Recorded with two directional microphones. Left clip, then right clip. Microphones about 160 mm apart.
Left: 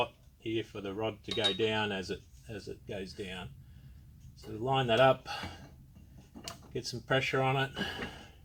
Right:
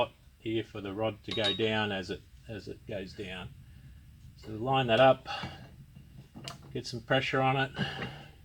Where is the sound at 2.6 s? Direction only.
25° right (ahead or behind).